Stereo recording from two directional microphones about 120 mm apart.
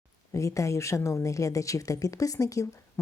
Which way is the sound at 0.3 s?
25° left (ahead or behind).